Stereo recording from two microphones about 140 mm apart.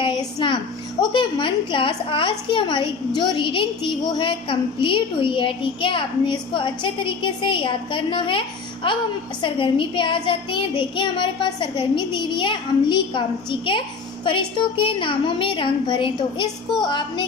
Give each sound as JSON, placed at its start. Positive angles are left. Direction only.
{"t": 0.0, "sound": "a woman's voice", "side_deg": 35}